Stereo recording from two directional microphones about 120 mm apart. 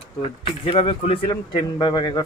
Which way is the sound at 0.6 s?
45° left (ahead or behind).